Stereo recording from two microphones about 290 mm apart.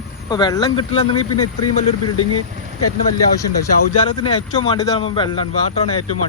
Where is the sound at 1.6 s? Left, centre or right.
Left.